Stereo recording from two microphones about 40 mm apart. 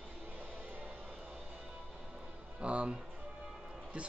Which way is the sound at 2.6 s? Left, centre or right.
Right.